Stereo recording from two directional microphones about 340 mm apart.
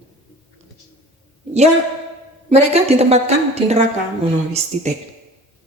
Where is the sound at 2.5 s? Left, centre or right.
Centre.